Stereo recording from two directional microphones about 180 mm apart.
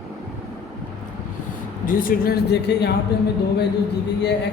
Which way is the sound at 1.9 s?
50° left (ahead or behind).